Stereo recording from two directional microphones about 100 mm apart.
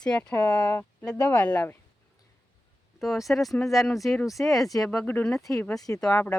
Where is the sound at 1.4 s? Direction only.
15° left (ahead or behind).